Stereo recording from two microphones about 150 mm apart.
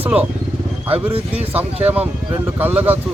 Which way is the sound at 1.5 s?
10° right (ahead or behind).